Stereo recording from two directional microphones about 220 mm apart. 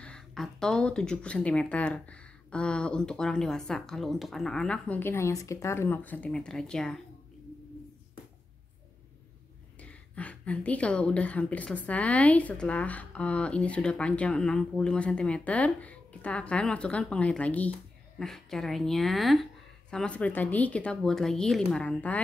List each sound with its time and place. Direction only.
0.0 s a woman's voice: 5° left (ahead or behind)
9.8 s a woman's voice: 5° left (ahead or behind)